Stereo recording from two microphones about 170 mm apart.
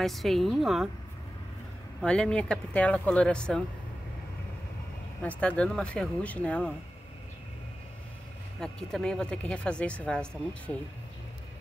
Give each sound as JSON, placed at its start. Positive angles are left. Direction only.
{"t": 0.0, "sound": "a woman's voice", "side_deg": 0}
{"t": 2.0, "sound": "a woman's voice", "side_deg": 5}
{"t": 5.2, "sound": "speech", "side_deg": 10}
{"t": 8.5, "sound": "a woman's voice", "side_deg": 5}